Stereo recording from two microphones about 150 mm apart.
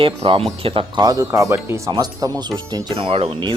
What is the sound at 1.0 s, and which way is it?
Speech, 20° right (ahead or behind).